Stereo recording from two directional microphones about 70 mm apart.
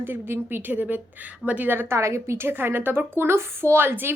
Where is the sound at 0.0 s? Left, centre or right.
Right.